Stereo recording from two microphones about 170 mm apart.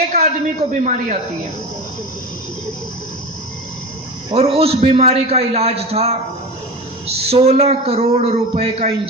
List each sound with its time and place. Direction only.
0.1 s a man's voice: 45° right (ahead or behind)
4.3 s a man's voice: 35° right (ahead or behind)